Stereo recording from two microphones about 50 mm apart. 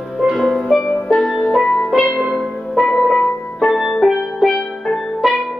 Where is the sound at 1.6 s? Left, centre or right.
Centre.